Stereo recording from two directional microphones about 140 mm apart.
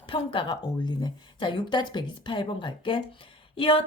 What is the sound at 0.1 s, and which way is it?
A woman's voice, 40° left (ahead or behind).